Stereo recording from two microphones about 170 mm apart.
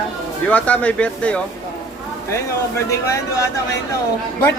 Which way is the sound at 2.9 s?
20° left (ahead or behind).